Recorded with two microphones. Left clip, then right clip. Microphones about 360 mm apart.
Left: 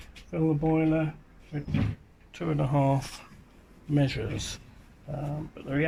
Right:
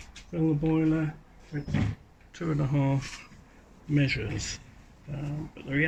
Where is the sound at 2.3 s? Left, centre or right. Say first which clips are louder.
Left 3 dB; centre.